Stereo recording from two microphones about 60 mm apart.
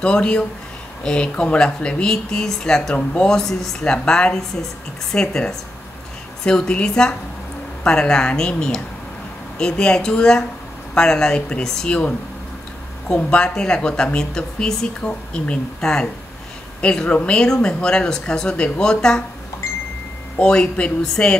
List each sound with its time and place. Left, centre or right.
0.0 s speech: centre
20.4 s speech: centre